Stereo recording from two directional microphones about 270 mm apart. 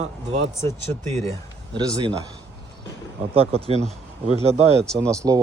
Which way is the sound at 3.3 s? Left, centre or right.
Right.